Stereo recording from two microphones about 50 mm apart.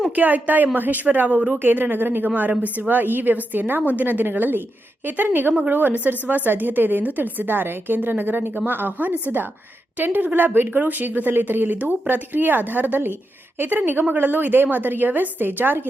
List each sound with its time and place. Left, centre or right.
0.2 s a woman's voice: right
1.6 s a woman's voice: right